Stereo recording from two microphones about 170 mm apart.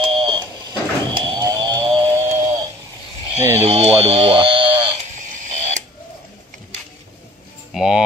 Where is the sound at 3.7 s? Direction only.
35° right (ahead or behind).